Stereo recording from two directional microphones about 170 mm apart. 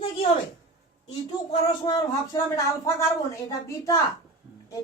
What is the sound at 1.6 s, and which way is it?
Speech, 25° left (ahead or behind).